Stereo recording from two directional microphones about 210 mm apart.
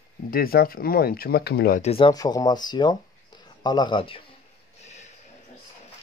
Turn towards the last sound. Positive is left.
turn(degrees=35)  # may be behind; listen again after turning